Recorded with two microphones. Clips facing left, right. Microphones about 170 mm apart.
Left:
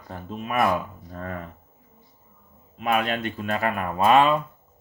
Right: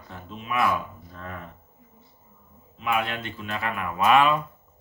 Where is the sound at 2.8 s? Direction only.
55° left (ahead or behind).